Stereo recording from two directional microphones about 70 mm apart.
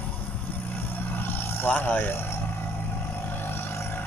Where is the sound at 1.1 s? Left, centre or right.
Left.